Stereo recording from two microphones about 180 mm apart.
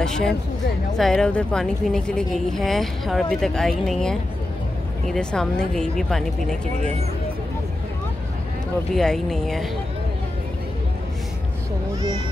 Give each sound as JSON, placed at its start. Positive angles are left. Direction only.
{"t": 0.0, "sound": "a woman's voice", "side_deg": 5}
{"t": 8.9, "sound": "a woman's voice", "side_deg": 5}